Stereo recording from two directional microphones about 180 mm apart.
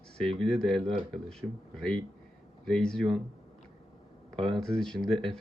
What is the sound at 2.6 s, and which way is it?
Speech, 5° left (ahead or behind).